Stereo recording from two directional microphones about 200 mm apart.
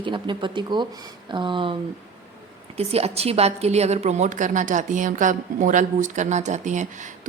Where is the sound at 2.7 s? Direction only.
30° right (ahead or behind).